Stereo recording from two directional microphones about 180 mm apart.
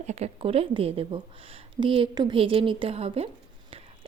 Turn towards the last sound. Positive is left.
turn(degrees=-35)  # may be behind; listen again after turning